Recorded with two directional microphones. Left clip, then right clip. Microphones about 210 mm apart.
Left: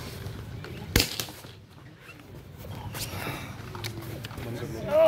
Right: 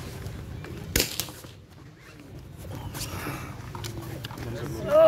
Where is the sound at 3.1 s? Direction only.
Centre (ahead or behind).